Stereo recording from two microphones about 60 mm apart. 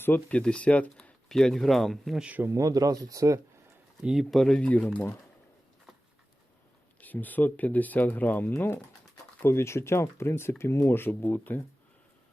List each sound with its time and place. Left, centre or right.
0.3 s speech: left
1.3 s speech: centre
2.5 s speech: right
4.0 s speech: centre
4.6 s speech: left
7.0 s speech: left